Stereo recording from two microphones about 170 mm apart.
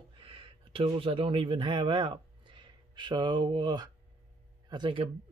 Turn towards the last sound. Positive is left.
turn(degrees=-30)  # may be behind; listen again after turning